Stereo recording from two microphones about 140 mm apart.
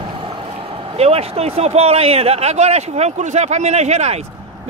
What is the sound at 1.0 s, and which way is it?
Speech, 45° right (ahead or behind).